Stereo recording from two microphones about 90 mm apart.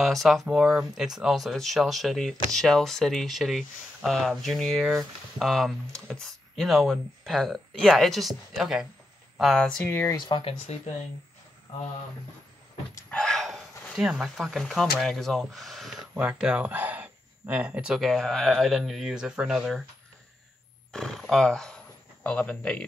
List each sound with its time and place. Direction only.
0.0 s speech: centre (ahead or behind)
9.8 s speech: 25° left (ahead or behind)
10.1 s speech: 60° left (ahead or behind); by 10.8 s 75° left (ahead or behind)
13.1 s speech: 5° left (ahead or behind)
16.2 s speech: 10° right (ahead or behind)
18.0 s speech: centre (ahead or behind)
20.9 s speech: centre (ahead or behind)